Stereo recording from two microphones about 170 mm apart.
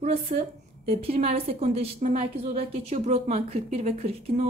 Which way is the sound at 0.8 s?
35° right (ahead or behind).